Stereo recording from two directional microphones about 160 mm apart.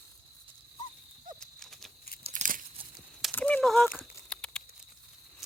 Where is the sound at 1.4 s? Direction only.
5° left (ahead or behind).